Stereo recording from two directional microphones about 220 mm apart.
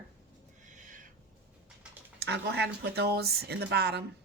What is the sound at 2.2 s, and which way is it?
Speech, 50° right (ahead or behind).